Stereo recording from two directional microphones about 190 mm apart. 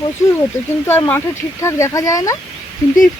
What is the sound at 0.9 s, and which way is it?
Speech, 10° left (ahead or behind).